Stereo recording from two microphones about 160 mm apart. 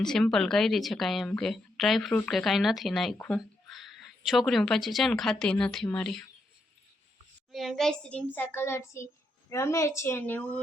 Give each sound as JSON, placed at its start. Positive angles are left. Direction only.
{"t": 0.0, "sound": "speech", "side_deg": 5}
{"t": 7.5, "sound": "a child's voice", "side_deg": 0}